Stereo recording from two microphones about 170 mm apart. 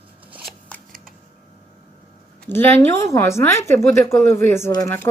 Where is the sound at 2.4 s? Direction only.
15° left (ahead or behind).